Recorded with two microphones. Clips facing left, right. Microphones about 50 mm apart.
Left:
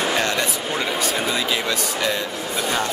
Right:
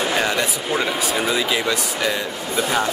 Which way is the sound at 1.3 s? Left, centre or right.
Centre.